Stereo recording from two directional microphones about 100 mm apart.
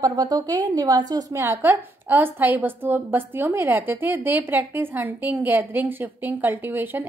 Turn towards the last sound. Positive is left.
turn(degrees=-20)  # may be behind; listen again after turning